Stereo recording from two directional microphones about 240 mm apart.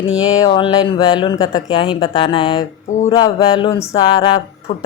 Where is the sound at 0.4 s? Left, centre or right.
Centre.